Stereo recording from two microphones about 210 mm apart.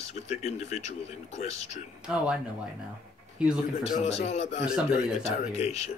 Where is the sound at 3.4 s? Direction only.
5° right (ahead or behind).